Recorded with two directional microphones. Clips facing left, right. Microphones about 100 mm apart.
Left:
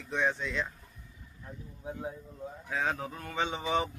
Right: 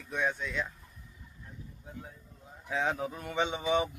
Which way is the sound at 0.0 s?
5° right (ahead or behind).